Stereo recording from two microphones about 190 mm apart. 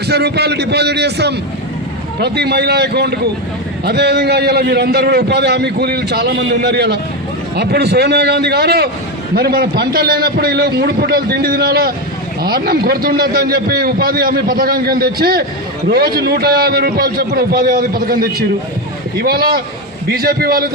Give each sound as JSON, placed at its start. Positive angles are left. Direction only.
{"t": 0.1, "sound": "a man's voice", "side_deg": -60}